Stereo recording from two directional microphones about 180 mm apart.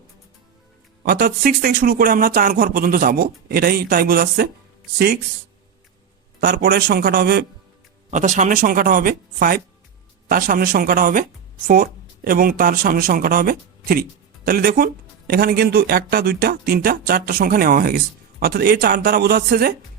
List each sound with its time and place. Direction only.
1.0 s speech: 60° right (ahead or behind)
6.4 s speech: 60° right (ahead or behind)
8.1 s speech: 40° right (ahead or behind); by 19.7 s 55° right (ahead or behind)